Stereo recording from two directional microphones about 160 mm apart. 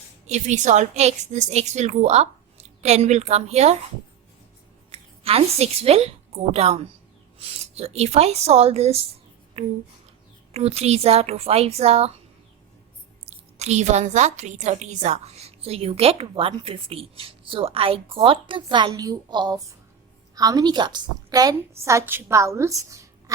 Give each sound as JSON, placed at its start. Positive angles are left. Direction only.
{"t": 0.3, "sound": "a woman's voice", "side_deg": -45}
{"t": 4.9, "sound": "a woman's voice", "side_deg": -40}
{"t": 13.2, "sound": "a woman's voice", "side_deg": -45}